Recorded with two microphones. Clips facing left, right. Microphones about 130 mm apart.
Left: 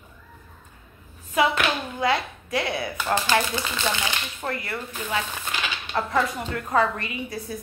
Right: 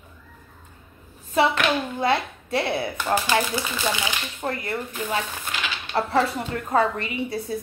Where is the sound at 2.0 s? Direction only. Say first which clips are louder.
Right 1 dB; 25° right (ahead or behind).